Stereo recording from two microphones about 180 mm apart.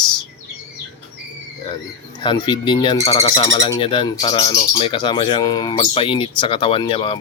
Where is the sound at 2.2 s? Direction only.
25° left (ahead or behind).